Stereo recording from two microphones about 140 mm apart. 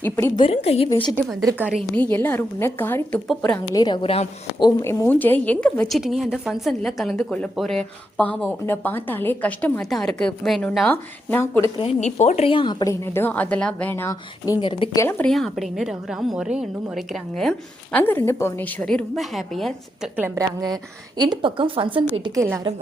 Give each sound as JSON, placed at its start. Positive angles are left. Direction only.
{"t": 0.0, "sound": "a woman's voice", "side_deg": 15}
{"t": 0.3, "sound": "a woman's voice", "side_deg": 45}
{"t": 1.5, "sound": "a woman's voice", "side_deg": -10}
{"t": 2.0, "sound": "a woman's voice", "side_deg": 10}
{"t": 3.8, "sound": "a woman's voice", "side_deg": 30}
{"t": 4.8, "sound": "a woman's voice", "side_deg": 20}
{"t": 11.8, "sound": "a woman's voice", "side_deg": 50}
{"t": 12.5, "sound": "a woman's voice", "side_deg": 35}
{"t": 12.8, "sound": "a woman's voice", "side_deg": 20}
{"t": 14.6, "sound": "a woman's voice", "side_deg": 35}
{"t": 15.2, "sound": "a woman's voice", "side_deg": 5}
{"t": 17.9, "sound": "a woman's voice", "side_deg": 15}
{"t": 20.1, "sound": "a woman's voice", "side_deg": -20}
{"t": 22.4, "sound": "a woman's voice", "side_deg": -20}